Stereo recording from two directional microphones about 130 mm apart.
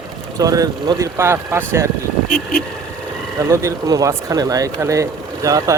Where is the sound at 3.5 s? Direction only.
25° right (ahead or behind).